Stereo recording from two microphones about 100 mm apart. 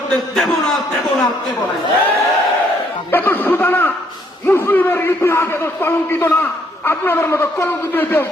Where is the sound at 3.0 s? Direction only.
20° left (ahead or behind).